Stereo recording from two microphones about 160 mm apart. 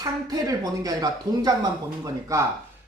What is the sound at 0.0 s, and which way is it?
Speech, 25° right (ahead or behind).